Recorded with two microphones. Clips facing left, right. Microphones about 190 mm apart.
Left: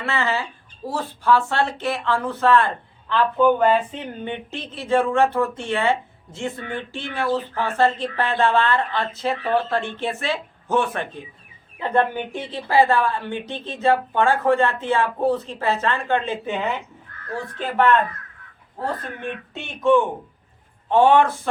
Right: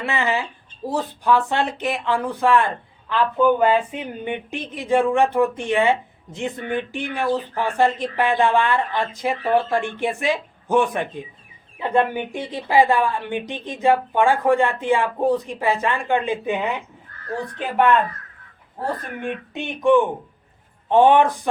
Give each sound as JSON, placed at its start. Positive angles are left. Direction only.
{"t": 0.0, "sound": "speech", "side_deg": -15}
{"t": 19.2, "sound": "speech", "side_deg": -15}